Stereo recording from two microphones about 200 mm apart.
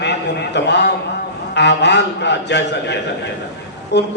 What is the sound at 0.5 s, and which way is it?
A man's voice, 60° left (ahead or behind).